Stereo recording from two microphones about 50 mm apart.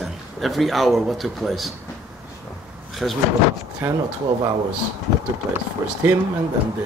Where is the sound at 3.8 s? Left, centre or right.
Right.